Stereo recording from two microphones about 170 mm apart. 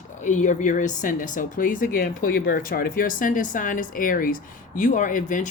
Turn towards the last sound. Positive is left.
turn(degrees=50)  # may be behind; listen again after turning